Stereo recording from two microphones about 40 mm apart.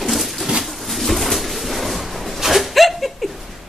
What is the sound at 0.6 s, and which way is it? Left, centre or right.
Pigeon, centre.